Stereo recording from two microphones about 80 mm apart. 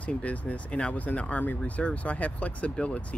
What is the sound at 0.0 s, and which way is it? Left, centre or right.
A man's voice, centre.